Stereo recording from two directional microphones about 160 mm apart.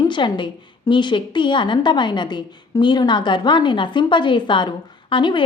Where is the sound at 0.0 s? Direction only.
30° left (ahead or behind).